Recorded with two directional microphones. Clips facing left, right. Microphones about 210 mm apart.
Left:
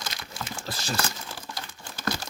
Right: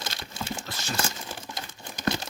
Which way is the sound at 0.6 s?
35° left (ahead or behind).